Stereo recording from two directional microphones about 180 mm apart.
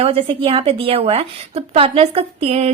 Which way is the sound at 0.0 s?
30° right (ahead or behind).